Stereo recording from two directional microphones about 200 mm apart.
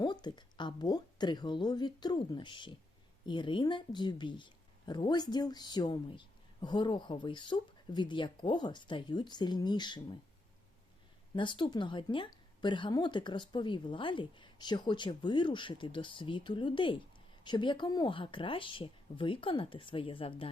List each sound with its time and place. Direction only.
0.0 s speech: 20° left (ahead or behind)
11.3 s speech: 25° left (ahead or behind)